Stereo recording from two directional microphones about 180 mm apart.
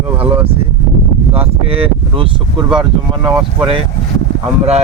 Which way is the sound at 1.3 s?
30° right (ahead or behind).